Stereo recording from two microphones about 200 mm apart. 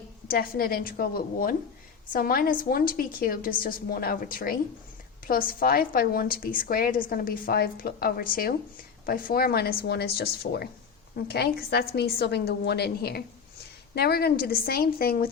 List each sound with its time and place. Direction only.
0.3 s a woman's voice: 50° left (ahead or behind)